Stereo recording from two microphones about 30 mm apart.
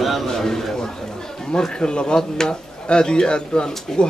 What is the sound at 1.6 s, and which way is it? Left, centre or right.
Speech, left.